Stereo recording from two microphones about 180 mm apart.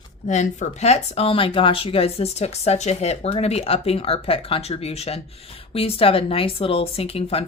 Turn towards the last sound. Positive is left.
turn(degrees=35)  # may be behind; listen again after turning